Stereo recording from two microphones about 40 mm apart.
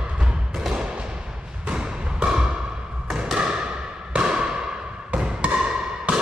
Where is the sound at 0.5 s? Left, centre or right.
Centre.